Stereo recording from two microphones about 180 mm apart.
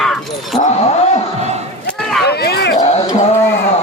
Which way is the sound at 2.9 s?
40° left (ahead or behind).